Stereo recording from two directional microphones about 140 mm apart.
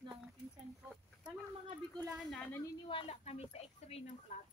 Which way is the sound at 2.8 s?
40° left (ahead or behind).